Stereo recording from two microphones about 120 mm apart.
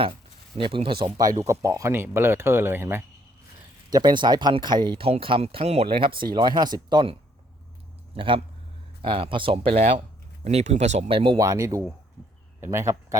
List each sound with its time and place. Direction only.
0.5 s speech: 45° right (ahead or behind); by 3.0 s 20° right (ahead or behind)
3.8 s speech: 35° right (ahead or behind); by 11.0 s 70° right (ahead or behind)
11.1 s speech: 50° right (ahead or behind)
11.3 s speech: 25° right (ahead or behind)